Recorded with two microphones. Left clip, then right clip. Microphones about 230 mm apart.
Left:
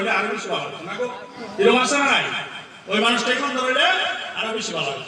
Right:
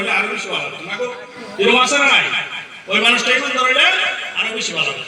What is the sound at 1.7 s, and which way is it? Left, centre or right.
A man's voice, left.